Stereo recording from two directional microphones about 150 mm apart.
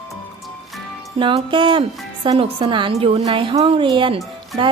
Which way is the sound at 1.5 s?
35° right (ahead or behind).